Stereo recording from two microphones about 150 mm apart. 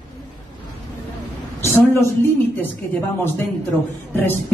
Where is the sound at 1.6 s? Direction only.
15° left (ahead or behind).